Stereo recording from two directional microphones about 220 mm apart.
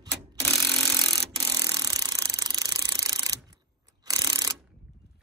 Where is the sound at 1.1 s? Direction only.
15° right (ahead or behind).